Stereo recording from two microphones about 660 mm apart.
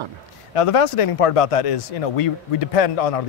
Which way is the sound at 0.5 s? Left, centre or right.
Left.